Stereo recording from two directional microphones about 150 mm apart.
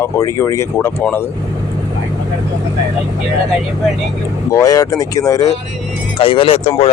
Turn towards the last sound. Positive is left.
turn(degrees=40)  # may be behind; listen again after turning